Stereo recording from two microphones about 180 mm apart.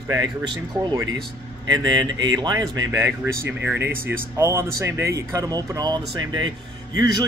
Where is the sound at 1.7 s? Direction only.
25° right (ahead or behind).